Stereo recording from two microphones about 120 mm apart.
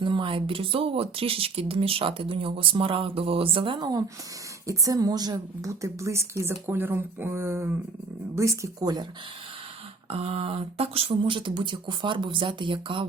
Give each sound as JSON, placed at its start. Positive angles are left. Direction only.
{"t": 0.0, "sound": "speech", "side_deg": -45}
{"t": 4.6, "sound": "a woman's voice", "side_deg": -25}
{"t": 10.1, "sound": "speech", "side_deg": -55}